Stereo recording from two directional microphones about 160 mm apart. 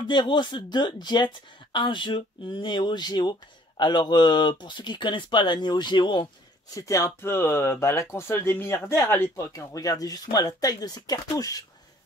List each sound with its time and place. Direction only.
0.1 s speech: 30° left (ahead or behind)